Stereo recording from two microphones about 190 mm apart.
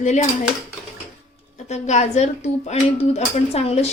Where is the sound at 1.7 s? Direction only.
35° left (ahead or behind).